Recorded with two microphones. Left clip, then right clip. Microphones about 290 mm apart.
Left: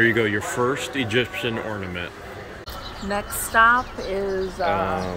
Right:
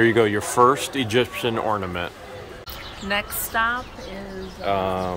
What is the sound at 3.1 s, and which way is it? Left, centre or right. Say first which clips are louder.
Speech: even; centre.